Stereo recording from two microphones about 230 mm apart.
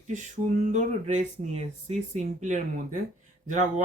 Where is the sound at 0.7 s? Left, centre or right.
Right.